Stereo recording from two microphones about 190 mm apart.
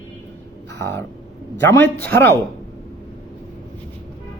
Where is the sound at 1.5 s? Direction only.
10° left (ahead or behind).